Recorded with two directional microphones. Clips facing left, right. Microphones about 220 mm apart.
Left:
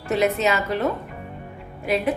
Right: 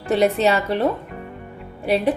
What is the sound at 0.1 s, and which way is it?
Speech, 30° right (ahead or behind).